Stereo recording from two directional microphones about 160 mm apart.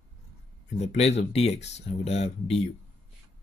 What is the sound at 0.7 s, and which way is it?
Speech, 45° left (ahead or behind).